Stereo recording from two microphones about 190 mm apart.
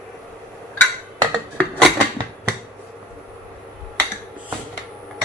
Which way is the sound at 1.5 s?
5° left (ahead or behind).